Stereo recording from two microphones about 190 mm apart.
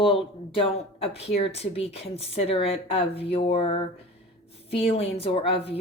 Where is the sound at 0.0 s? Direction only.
30° left (ahead or behind).